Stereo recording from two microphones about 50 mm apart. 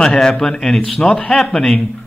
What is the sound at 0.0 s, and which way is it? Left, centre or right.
A man's voice, centre.